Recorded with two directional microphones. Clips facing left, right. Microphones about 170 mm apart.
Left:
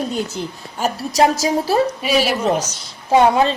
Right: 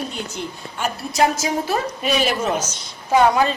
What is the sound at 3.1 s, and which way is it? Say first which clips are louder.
Speech: left 2 dB; 25° left (ahead or behind).